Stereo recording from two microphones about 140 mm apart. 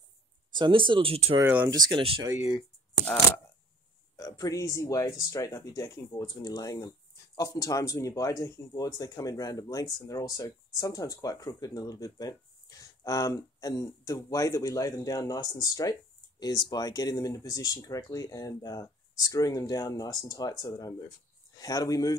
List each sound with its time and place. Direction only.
0.5 s speech: 35° right (ahead or behind)
1.4 s speech: 10° right (ahead or behind)
1.7 s speech: 35° right (ahead or behind)
2.2 s speech: 20° right (ahead or behind)
4.2 s speech: 25° left (ahead or behind)
21.5 s speech: 25° left (ahead or behind)